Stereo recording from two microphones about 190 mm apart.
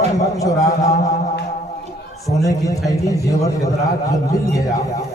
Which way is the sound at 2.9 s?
15° left (ahead or behind).